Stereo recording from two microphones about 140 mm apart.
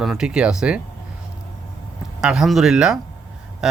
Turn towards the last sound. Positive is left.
turn(degrees=-5)  # may be behind; listen again after turning